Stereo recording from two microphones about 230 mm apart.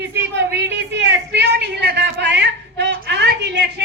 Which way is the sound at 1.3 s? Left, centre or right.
Right.